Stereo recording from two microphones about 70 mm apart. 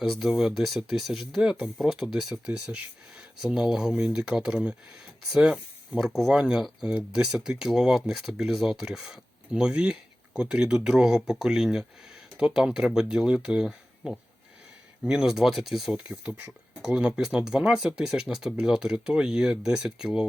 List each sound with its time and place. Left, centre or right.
0.0 s speech: centre
3.4 s speech: centre
16.0 s speech: centre